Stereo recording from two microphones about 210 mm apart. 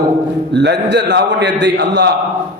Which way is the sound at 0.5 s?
55° right (ahead or behind).